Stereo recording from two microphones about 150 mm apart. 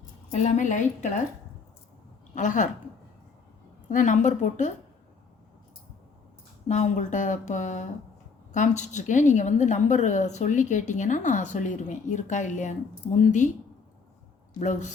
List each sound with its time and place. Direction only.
0.3 s a woman's voice: 50° left (ahead or behind)
2.3 s a woman's voice: 55° left (ahead or behind)
3.8 s a woman's voice: 55° left (ahead or behind)
6.7 s a woman's voice: 50° left (ahead or behind)
14.6 s a woman's voice: 55° left (ahead or behind)